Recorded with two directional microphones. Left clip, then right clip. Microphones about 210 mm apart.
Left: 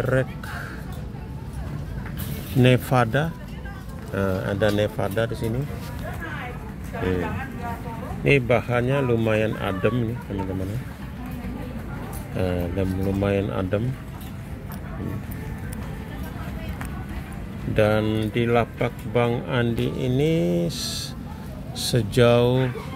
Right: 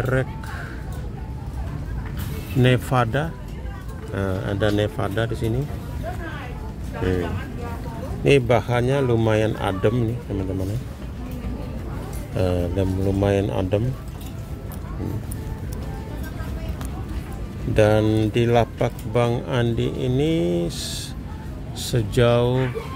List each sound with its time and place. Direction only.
0.0 s speech: centre (ahead or behind)
2.6 s speech: 5° left (ahead or behind)
8.2 s speech: 10° right (ahead or behind)
12.4 s speech: 15° right (ahead or behind)
17.7 s speech: 10° right (ahead or behind); by 22.7 s 10° left (ahead or behind)